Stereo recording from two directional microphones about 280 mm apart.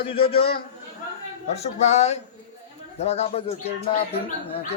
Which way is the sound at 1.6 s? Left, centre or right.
Left.